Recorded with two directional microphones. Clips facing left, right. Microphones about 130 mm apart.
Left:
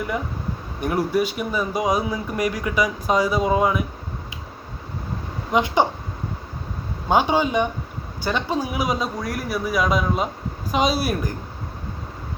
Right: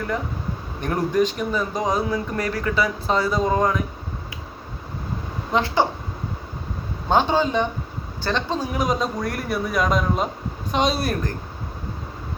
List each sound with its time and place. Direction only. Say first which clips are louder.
0.8 s speech: right 1 dB; 10° left (ahead or behind)
5.5 s speech: left 2 dB; 15° left (ahead or behind)
7.1 s speech: even; 10° left (ahead or behind)